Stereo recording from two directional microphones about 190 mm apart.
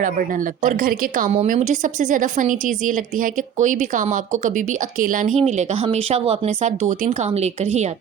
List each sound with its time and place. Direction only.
0.0 s speech: 45° right (ahead or behind)
5.4 s speech: 35° right (ahead or behind)